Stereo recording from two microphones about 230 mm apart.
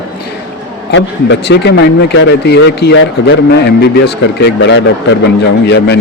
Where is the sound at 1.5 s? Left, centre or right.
Left.